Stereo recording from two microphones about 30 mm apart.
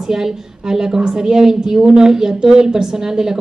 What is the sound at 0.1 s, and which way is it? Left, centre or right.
A woman's voice, centre.